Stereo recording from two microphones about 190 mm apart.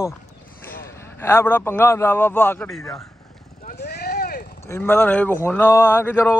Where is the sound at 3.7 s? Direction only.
60° left (ahead or behind).